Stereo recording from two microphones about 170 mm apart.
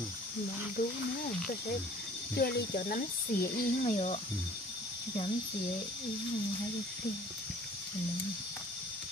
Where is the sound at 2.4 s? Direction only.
55° left (ahead or behind).